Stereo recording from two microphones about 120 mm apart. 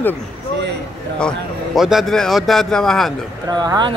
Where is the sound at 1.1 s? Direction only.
5° left (ahead or behind).